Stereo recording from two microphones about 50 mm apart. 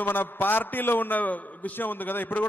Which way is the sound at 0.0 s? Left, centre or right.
Left.